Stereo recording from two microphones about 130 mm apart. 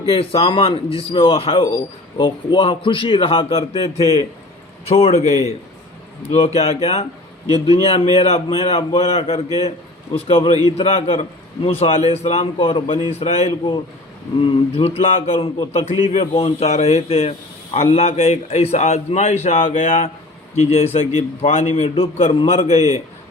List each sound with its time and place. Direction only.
0.0 s a man's voice: 45° left (ahead or behind); by 20.1 s 65° left (ahead or behind)
20.6 s a man's voice: 55° left (ahead or behind)